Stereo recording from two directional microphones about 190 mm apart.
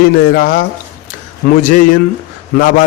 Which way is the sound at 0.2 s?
50° left (ahead or behind).